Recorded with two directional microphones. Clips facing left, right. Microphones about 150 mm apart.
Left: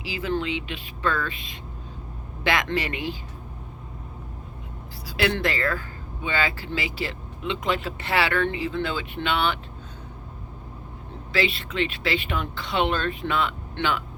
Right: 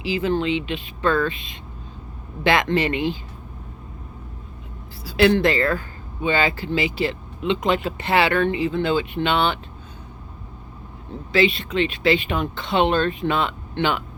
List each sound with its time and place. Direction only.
0.0 s speech: 25° right (ahead or behind)
5.0 s speech: 25° right (ahead or behind)
11.3 s speech: 20° right (ahead or behind)